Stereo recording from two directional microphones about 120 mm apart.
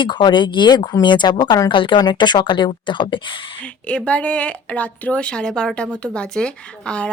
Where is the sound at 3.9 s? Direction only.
10° left (ahead or behind).